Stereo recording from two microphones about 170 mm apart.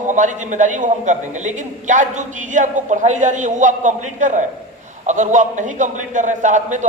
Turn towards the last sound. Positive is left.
turn(degrees=-45)  # may be behind; listen again after turning